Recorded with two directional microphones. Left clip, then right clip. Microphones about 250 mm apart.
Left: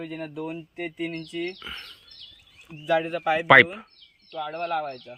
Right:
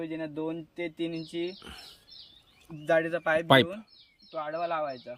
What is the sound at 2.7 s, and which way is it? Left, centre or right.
Speech, left.